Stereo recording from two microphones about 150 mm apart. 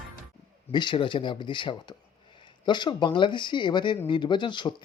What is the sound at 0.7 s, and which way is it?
Speech, 30° left (ahead or behind).